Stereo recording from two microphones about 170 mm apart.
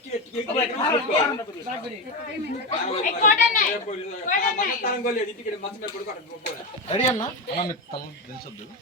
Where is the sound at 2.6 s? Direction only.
45° left (ahead or behind).